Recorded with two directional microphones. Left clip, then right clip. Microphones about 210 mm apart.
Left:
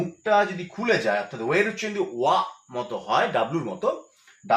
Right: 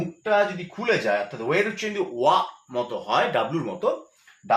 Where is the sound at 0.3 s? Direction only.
10° right (ahead or behind).